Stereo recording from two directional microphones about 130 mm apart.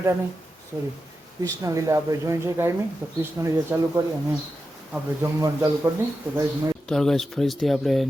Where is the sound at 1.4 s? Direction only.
25° right (ahead or behind).